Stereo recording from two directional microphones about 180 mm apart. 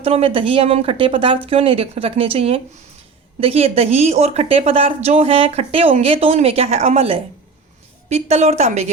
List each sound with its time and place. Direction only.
0.0 s a woman's voice: 30° right (ahead or behind)